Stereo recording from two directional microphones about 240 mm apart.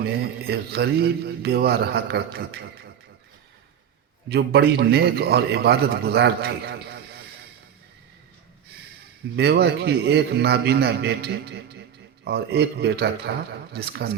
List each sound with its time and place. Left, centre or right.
0.0 s a man's voice: right
4.3 s a man's voice: right
9.3 s a man's voice: right